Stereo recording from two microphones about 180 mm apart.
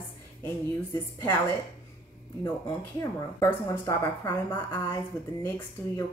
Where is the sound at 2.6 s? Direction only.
15° left (ahead or behind).